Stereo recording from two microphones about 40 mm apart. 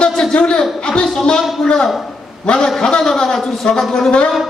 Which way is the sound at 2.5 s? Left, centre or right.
Left.